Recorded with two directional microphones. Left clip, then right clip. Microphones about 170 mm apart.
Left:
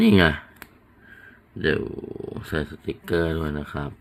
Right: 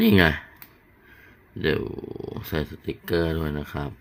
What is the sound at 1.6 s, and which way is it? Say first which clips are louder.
Speech: left 1 dB; centre (ahead or behind).